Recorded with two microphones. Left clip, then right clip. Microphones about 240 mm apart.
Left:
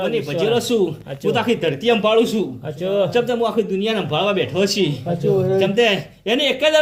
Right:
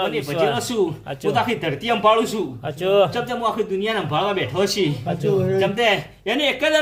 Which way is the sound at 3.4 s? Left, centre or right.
Centre.